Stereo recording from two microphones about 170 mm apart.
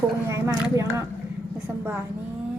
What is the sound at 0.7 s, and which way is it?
Speech, 15° right (ahead or behind).